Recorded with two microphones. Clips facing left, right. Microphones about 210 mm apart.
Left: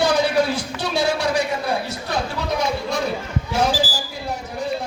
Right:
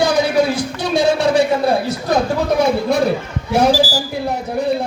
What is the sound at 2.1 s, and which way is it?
Speech, 40° right (ahead or behind).